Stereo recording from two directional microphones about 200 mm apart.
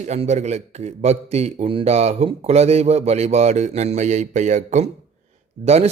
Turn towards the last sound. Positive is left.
turn(degrees=-30)  # may be behind; listen again after turning